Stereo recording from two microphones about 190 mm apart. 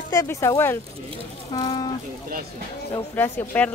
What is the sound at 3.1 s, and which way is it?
Speech, 10° left (ahead or behind).